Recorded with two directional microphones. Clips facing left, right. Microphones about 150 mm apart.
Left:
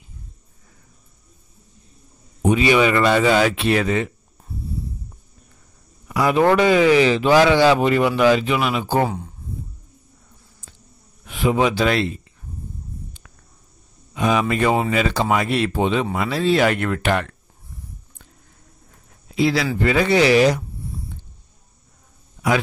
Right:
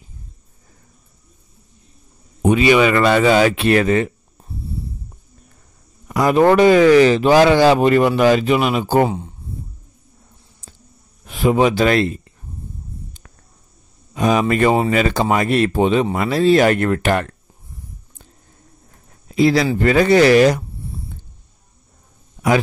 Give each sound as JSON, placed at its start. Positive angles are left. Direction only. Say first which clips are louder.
{"t": 2.4, "sound": "speech", "louder": "right 3 dB", "side_deg": -65}
{"t": 6.0, "sound": "a man's voice", "louder": "right 3 dB", "side_deg": -45}
{"t": 9.0, "sound": "speech", "louder": "right 4 dB", "side_deg": -20}
{"t": 11.2, "sound": "speech", "louder": "right 4 dB", "side_deg": -40}
{"t": 14.1, "sound": "speech", "louder": "right 3 dB", "side_deg": -40}
{"t": 14.9, "sound": "speech", "louder": "right 3 dB", "side_deg": -50}
{"t": 19.3, "sound": "speech", "louder": "right 5 dB", "side_deg": -45}